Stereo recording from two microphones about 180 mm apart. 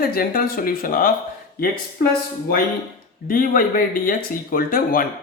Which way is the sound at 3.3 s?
50° left (ahead or behind).